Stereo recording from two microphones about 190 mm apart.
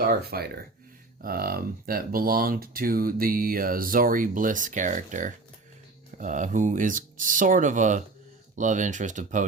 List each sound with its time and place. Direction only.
0.1 s speech: 55° right (ahead or behind)